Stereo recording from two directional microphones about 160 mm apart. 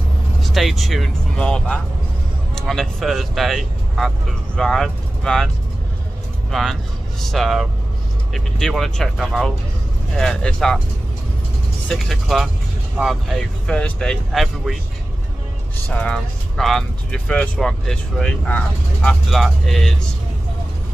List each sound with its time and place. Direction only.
0.4 s speech: centre (ahead or behind)
6.5 s speech: centre (ahead or behind)
11.9 s speech: centre (ahead or behind)
15.9 s speech: 5° left (ahead or behind)